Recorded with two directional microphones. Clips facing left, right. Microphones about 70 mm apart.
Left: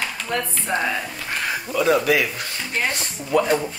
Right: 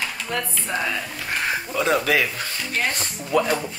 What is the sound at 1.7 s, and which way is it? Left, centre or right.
Speech, right.